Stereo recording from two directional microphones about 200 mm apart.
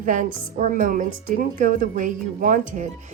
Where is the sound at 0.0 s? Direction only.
40° right (ahead or behind).